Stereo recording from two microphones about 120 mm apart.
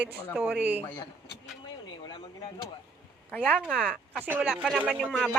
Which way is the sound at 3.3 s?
10° left (ahead or behind).